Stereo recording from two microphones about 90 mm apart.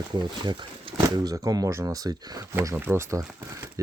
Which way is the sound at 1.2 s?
45° right (ahead or behind).